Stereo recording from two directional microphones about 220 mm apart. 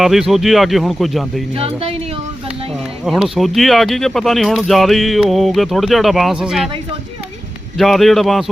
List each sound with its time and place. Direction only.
0.0 s speech: centre (ahead or behind)
1.5 s speech: 25° right (ahead or behind)
3.0 s speech: centre (ahead or behind)
7.8 s speech: centre (ahead or behind)